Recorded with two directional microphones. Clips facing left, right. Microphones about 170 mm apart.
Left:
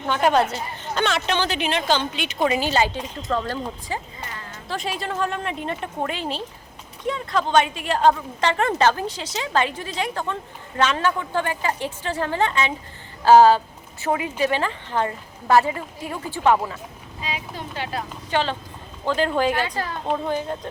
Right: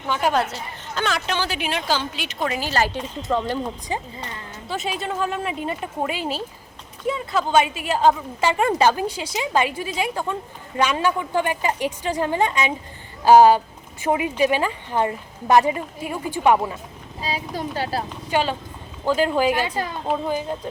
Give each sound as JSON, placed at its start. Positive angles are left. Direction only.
{"t": 0.1, "sound": "a woman's voice", "side_deg": 0}
{"t": 2.9, "sound": "a woman's voice", "side_deg": -15}
{"t": 4.7, "sound": "a woman's voice", "side_deg": 0}
{"t": 17.2, "sound": "speech", "side_deg": -35}
{"t": 18.3, "sound": "a woman's voice", "side_deg": -10}